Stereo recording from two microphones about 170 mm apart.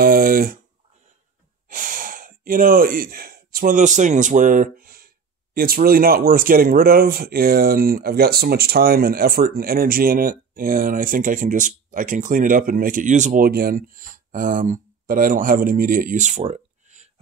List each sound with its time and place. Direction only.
0.0 s speech: 55° right (ahead or behind)
1.7 s speech: 50° right (ahead or behind)